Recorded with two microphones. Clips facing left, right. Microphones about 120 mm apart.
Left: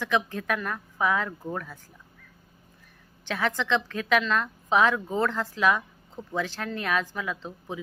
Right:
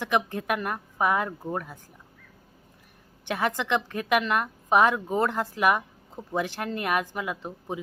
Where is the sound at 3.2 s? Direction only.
15° right (ahead or behind).